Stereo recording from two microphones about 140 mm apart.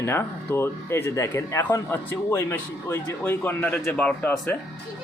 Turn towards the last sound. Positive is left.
turn(degrees=10)  # may be behind; listen again after turning